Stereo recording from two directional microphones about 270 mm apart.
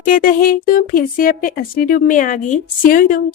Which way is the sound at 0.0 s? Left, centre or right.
Left.